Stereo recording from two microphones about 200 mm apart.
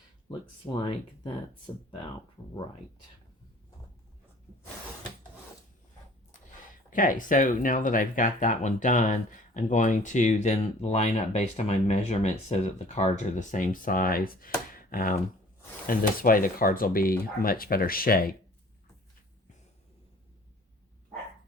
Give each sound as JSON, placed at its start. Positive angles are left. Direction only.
{"t": 0.3, "sound": "speech", "side_deg": 25}
{"t": 6.9, "sound": "speech", "side_deg": 40}